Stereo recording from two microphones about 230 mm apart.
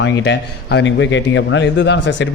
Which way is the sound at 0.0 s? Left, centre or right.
Left.